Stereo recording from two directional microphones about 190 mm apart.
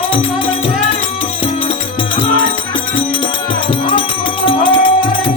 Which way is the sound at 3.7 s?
25° left (ahead or behind).